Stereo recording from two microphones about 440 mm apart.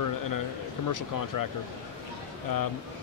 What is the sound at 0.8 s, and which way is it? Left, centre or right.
Speech, left.